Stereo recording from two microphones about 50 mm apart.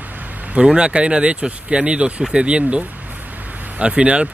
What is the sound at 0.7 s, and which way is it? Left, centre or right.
Speech, centre.